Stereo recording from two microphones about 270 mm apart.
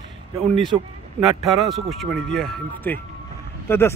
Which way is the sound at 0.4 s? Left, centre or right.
Centre.